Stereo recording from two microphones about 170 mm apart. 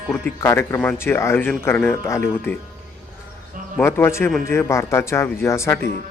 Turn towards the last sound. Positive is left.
turn(degrees=15)  # may be behind; listen again after turning